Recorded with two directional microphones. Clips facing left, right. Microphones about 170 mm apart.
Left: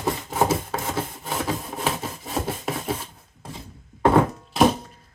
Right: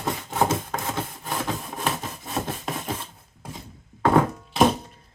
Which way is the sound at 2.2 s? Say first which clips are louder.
Left 3 dB; 5° left (ahead or behind).